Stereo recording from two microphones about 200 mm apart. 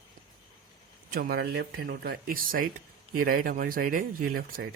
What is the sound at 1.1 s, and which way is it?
Speech, 50° right (ahead or behind).